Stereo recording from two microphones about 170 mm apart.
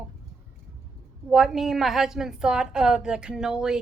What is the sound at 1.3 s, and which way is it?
A woman's voice, centre (ahead or behind).